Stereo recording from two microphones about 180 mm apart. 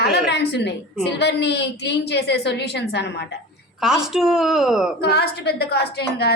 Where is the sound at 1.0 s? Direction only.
70° left (ahead or behind).